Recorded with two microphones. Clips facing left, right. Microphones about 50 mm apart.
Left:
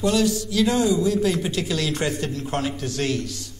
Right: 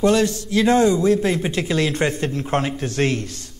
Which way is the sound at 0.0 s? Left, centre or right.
Right.